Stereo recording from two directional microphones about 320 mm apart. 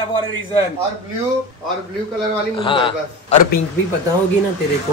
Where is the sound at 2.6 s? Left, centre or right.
Centre.